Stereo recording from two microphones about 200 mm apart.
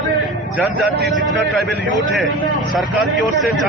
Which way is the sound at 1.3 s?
Centre (ahead or behind).